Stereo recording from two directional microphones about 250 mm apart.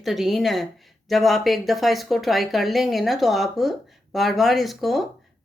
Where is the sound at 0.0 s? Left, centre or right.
Centre.